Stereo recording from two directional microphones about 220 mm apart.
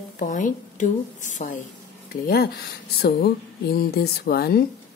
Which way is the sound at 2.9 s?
45° left (ahead or behind).